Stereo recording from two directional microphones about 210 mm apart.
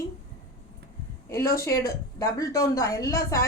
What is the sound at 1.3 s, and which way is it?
A woman's voice, 15° left (ahead or behind).